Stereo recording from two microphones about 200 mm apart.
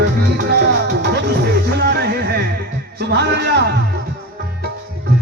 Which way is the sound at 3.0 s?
55° right (ahead or behind).